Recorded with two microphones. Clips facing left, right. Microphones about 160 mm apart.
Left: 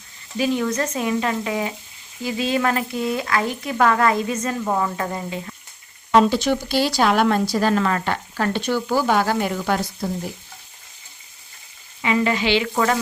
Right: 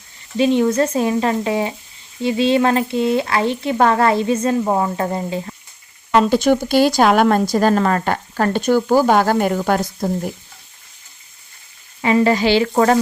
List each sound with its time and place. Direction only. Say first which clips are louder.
0.3 s speech: right 6 dB; 25° right (ahead or behind)
6.1 s speech: even; centre (ahead or behind)
6.3 s speech: right 6 dB; 50° right (ahead or behind)
12.0 s sizzle: right 5 dB; 35° right (ahead or behind)